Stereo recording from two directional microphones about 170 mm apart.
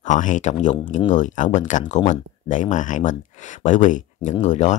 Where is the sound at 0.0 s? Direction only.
45° left (ahead or behind).